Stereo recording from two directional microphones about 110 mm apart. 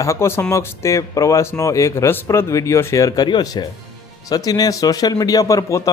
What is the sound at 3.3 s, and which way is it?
A man's voice, 40° left (ahead or behind).